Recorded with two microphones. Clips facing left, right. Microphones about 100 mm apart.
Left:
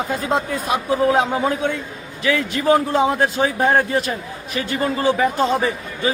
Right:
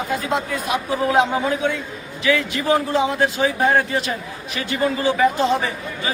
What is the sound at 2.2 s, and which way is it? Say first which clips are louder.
A man's voice: left 2 dB; 45° left (ahead or behind).